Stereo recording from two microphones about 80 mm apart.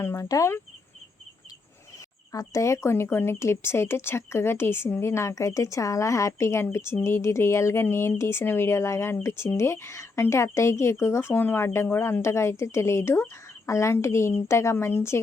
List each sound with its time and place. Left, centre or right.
0.0 s speech: left
2.3 s speech: left